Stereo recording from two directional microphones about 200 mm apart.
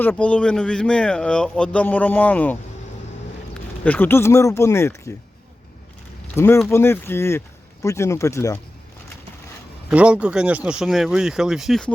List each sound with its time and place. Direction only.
0.0 s speech: 10° left (ahead or behind)
3.8 s speech: 10° left (ahead or behind)
6.3 s speech: 10° left (ahead or behind)
9.9 s speech: 5° right (ahead or behind)